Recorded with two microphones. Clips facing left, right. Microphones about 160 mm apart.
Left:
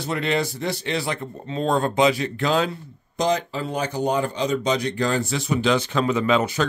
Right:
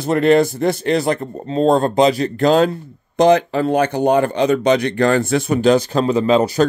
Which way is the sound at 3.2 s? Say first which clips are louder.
Right 10 dB; 60° right (ahead or behind).